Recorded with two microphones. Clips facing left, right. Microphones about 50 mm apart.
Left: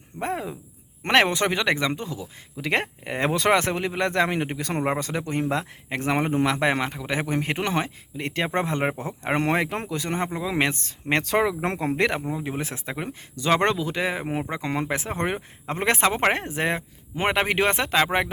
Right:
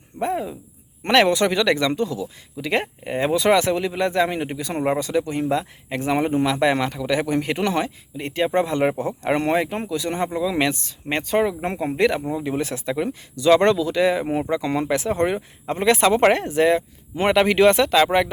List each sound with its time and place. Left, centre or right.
0.2 s speech: left
2.6 s speech: left
4.0 s speech: left
6.7 s speech: left
8.1 s speech: left
8.6 s speech: left
9.6 s speech: left
9.9 s speech: left
10.2 s speech: left
11.1 s speech: left
12.2 s speech: left